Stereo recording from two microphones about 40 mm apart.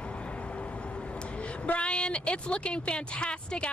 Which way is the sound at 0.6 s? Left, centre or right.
Left.